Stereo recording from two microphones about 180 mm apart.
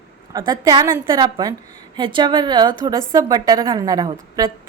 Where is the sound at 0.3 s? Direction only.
20° right (ahead or behind).